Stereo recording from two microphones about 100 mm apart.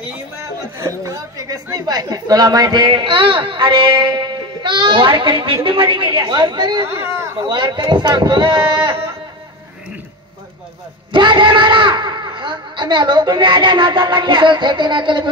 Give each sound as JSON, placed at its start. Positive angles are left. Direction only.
{"t": 0.1, "sound": "a sound", "side_deg": -30}
{"t": 1.9, "sound": "a man's voice", "side_deg": -40}
{"t": 11.1, "sound": "a man's voice", "side_deg": -55}